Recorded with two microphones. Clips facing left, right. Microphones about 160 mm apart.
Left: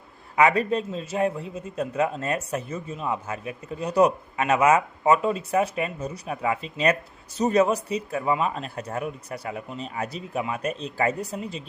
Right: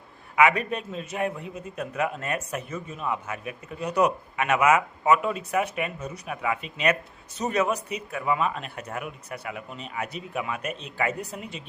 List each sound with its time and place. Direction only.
0.3 s a man's voice: 30° left (ahead or behind)